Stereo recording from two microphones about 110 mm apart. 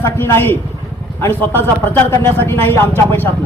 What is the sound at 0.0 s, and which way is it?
A man's voice, 20° left (ahead or behind).